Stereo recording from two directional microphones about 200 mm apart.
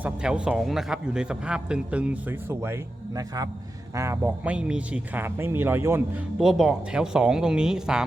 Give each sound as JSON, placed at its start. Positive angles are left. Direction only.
{"t": 0.0, "sound": "a man's voice", "side_deg": -5}